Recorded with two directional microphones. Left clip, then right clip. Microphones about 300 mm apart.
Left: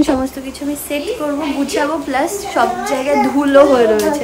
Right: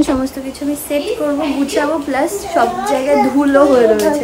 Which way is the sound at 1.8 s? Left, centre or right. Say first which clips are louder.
Right 1 dB; centre.